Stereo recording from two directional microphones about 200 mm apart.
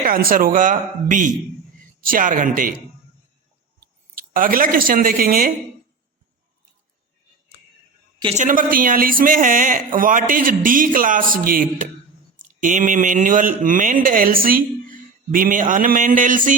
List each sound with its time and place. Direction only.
0.0 s speech: 45° right (ahead or behind)
4.4 s speech: 45° right (ahead or behind)
8.2 s speech: 35° right (ahead or behind)